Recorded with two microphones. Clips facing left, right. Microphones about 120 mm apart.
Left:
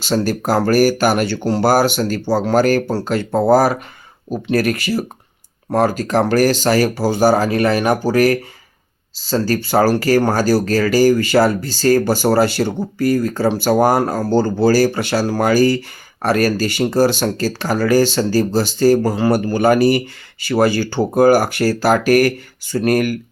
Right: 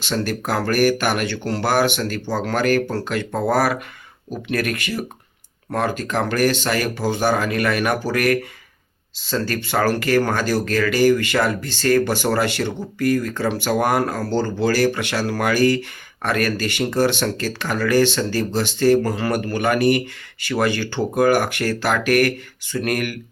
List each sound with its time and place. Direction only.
0.0 s speech: 35° left (ahead or behind)